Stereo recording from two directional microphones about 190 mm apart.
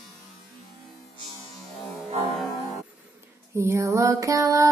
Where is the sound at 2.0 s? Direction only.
30° right (ahead or behind).